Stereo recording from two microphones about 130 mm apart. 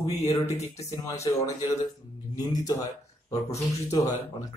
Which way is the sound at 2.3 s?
30° left (ahead or behind).